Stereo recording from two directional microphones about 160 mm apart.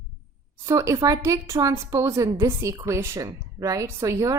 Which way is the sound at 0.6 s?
20° right (ahead or behind).